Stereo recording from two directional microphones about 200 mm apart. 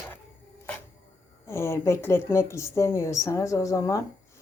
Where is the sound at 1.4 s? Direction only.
15° left (ahead or behind).